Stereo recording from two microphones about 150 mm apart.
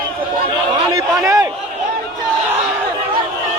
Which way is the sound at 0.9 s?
20° right (ahead or behind).